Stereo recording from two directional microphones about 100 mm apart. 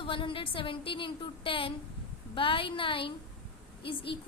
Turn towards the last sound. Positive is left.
turn(degrees=60)  # may be behind; listen again after turning